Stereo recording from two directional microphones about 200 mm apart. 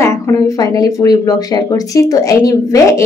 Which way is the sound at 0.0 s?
15° left (ahead or behind).